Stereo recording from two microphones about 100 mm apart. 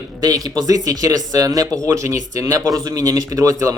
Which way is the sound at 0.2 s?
40° right (ahead or behind).